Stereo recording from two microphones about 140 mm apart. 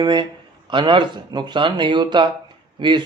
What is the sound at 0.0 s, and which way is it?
Speech, 35° right (ahead or behind).